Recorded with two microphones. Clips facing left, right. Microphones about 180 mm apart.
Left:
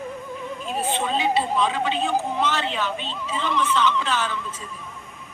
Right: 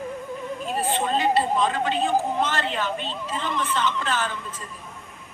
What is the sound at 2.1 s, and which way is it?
A man's voice, 45° right (ahead or behind).